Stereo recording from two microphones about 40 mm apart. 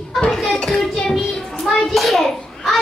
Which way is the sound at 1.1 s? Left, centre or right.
Centre.